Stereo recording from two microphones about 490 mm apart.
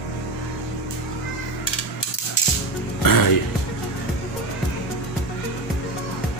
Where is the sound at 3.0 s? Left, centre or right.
Left.